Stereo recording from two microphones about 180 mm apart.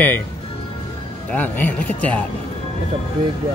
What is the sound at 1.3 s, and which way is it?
Speech, 10° left (ahead or behind).